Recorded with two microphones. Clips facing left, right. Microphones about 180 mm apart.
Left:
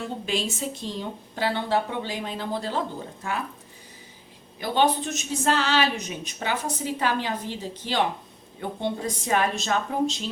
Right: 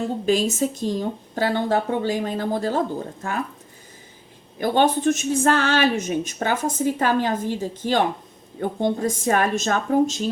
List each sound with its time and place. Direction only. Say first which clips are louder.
0.3 s a woman's voice: right 9 dB; 45° right (ahead or behind)
4.5 s a woman's voice: right 4 dB; 50° right (ahead or behind)